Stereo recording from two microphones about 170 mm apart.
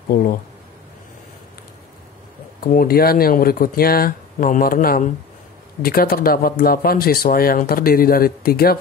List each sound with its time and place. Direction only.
0.1 s speech: 55° left (ahead or behind)
2.6 s speech: 55° left (ahead or behind)